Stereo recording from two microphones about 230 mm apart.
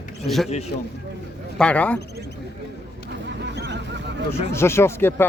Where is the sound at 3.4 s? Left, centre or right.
Right.